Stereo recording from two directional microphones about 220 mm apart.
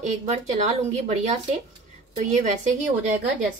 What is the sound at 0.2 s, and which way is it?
Speech, 30° right (ahead or behind).